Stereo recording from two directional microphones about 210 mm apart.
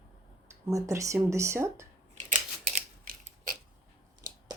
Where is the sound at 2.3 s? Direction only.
40° right (ahead or behind).